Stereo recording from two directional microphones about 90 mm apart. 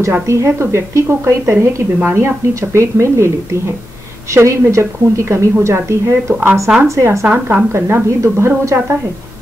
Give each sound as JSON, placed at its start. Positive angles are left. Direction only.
{"t": 0.0, "sound": "a woman's voice", "side_deg": -30}